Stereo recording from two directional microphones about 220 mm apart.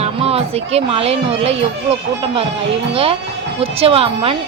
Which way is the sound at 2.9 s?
25° right (ahead or behind).